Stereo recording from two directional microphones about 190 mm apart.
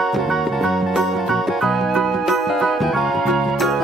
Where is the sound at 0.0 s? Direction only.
Centre (ahead or behind).